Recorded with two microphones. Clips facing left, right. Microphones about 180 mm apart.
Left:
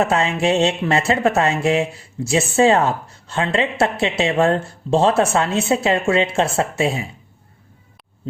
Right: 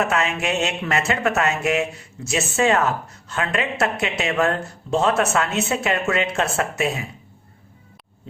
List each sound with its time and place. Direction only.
0.0 s speech: 30° left (ahead or behind)